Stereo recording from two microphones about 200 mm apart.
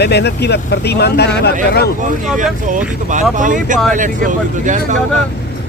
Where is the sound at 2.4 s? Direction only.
40° right (ahead or behind).